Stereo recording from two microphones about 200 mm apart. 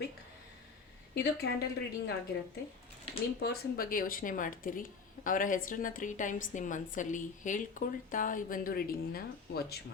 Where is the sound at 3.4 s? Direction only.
50° left (ahead or behind).